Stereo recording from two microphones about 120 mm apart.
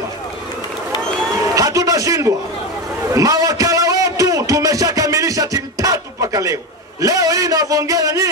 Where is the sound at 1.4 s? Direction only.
25° right (ahead or behind).